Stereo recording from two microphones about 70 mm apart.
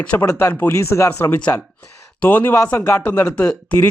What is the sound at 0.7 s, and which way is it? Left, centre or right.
Speech, left.